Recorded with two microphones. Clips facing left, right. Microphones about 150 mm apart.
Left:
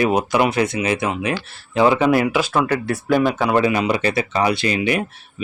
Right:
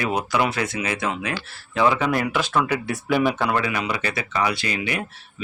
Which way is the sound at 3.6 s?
25° left (ahead or behind).